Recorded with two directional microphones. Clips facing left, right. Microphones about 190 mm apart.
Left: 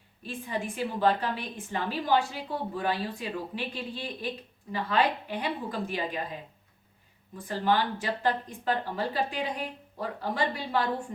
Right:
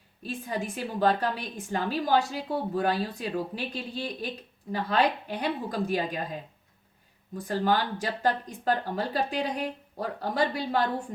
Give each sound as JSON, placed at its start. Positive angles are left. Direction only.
{"t": 0.2, "sound": "speech", "side_deg": -40}
{"t": 7.3, "sound": "speech", "side_deg": -40}